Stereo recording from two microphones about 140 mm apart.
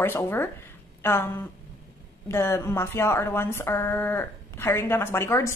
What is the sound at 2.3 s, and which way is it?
Speech, 20° left (ahead or behind).